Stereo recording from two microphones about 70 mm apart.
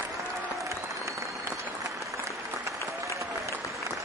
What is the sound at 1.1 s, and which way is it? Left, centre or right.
Applause, right.